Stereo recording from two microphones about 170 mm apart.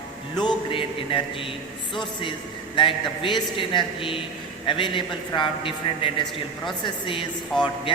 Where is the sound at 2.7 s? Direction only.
30° left (ahead or behind).